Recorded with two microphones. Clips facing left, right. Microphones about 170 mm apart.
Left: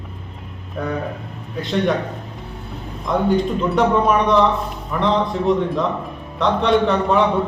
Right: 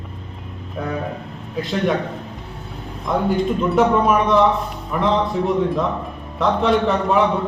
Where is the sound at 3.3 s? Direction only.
Centre (ahead or behind).